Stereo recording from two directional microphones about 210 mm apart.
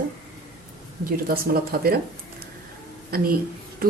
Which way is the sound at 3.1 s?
45° right (ahead or behind).